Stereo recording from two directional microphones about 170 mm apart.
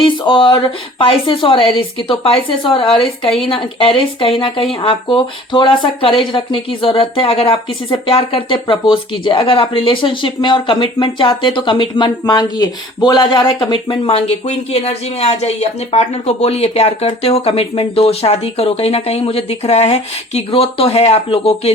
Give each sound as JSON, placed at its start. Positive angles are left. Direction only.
{"t": 0.0, "sound": "speech", "side_deg": 30}